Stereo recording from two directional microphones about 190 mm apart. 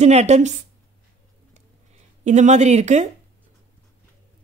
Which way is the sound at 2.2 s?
40° right (ahead or behind).